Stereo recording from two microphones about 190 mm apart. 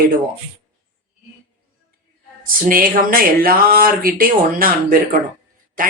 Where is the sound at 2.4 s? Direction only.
45° right (ahead or behind).